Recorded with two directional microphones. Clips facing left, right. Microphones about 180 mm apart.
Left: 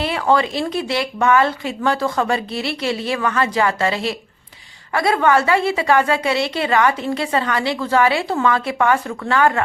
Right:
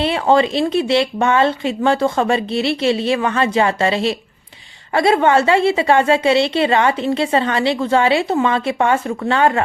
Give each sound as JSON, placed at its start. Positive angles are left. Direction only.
{"t": 0.0, "sound": "a woman's voice", "side_deg": -25}